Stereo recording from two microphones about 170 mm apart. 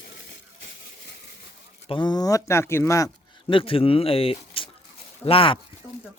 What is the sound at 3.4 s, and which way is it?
Speech, 30° left (ahead or behind).